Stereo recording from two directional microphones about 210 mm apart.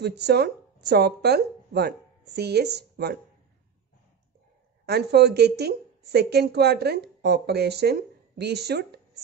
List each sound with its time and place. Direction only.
0.0 s speech: 50° right (ahead or behind)
4.8 s a woman's voice: 50° right (ahead or behind)